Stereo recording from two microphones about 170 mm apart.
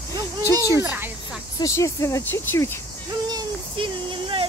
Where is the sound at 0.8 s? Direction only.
10° right (ahead or behind).